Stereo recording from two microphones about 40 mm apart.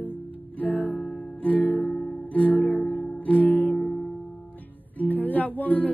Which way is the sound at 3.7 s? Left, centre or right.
Left.